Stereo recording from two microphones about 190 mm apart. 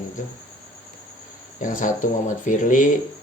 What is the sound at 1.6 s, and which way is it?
Speech, 45° left (ahead or behind).